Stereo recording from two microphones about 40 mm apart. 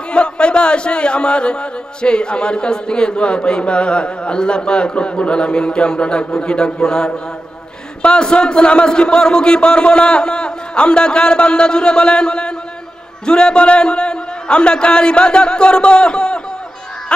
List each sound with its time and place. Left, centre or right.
0.1 s speech: left